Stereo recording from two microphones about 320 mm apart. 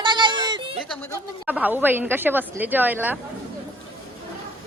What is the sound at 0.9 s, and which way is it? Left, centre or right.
Speech, centre.